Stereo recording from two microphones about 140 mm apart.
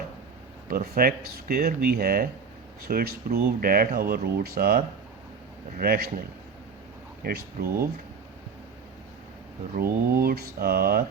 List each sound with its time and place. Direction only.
0.7 s speech: 90° right
5.8 s speech: 90° right
7.3 s speech: 90° right
9.7 s speech: 90° right